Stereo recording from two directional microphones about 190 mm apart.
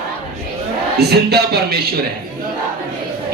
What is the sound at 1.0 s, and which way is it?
Speech, 60° right (ahead or behind).